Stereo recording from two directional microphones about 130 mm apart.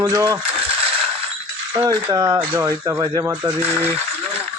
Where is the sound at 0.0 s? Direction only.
20° right (ahead or behind).